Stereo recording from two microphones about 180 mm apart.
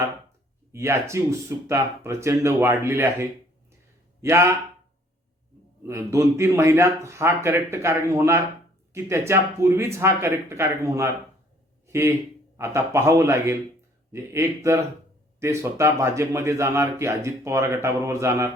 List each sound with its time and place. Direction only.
0.7 s speech: 15° right (ahead or behind)
5.8 s speech: 15° right (ahead or behind)